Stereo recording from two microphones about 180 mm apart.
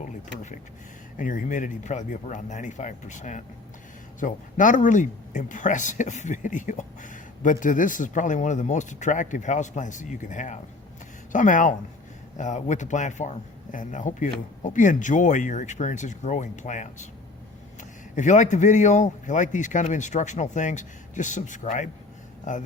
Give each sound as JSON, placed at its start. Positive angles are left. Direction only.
{"t": 1.1, "sound": "speech", "side_deg": 50}
{"t": 18.1, "sound": "speech", "side_deg": 45}